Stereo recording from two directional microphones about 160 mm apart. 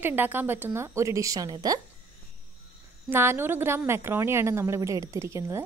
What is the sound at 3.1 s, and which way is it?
Speech, 15° right (ahead or behind).